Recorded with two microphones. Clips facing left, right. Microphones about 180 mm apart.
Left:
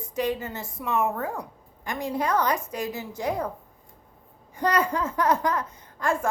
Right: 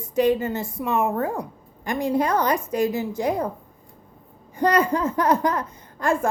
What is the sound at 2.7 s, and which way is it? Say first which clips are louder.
Speech: right 9 dB; 50° right (ahead or behind).